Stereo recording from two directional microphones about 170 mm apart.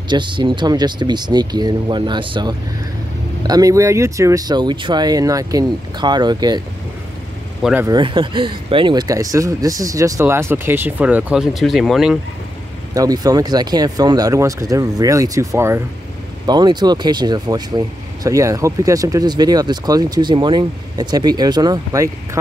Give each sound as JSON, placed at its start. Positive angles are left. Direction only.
{"t": 0.1, "sound": "speech", "side_deg": -25}
{"t": 7.8, "sound": "speech", "side_deg": -25}
{"t": 12.9, "sound": "speech", "side_deg": -20}